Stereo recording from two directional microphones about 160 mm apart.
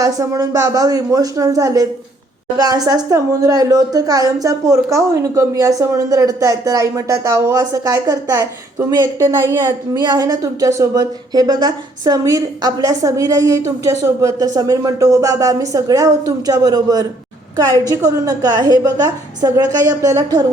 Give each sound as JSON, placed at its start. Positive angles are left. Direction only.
{"t": 0.0, "sound": "a woman's voice", "side_deg": -20}